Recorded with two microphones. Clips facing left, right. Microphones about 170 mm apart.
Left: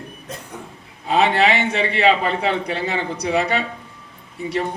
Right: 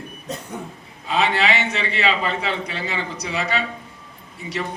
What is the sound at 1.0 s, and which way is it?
A man's voice, 55° left (ahead or behind).